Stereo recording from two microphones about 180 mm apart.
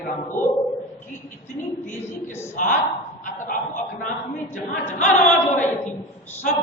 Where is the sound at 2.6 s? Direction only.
45° left (ahead or behind).